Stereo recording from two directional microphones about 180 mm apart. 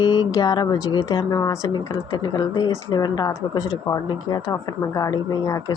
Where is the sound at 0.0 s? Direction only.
25° left (ahead or behind).